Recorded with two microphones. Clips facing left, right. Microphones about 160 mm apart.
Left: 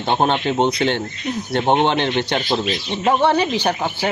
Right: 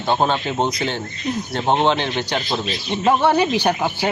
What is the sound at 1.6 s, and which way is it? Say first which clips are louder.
Speech: left 1 dB; 20° left (ahead or behind).